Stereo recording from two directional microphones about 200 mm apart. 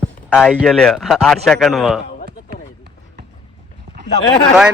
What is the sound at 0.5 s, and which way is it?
A man's voice, centre (ahead or behind).